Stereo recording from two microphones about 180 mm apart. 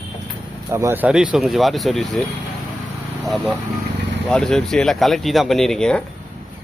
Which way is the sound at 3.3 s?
Centre (ahead or behind).